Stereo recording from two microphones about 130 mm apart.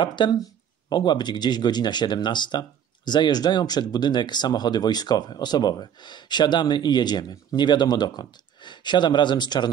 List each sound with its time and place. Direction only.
0.0 s speech: 35° left (ahead or behind)